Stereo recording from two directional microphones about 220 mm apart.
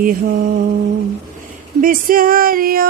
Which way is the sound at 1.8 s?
40° right (ahead or behind).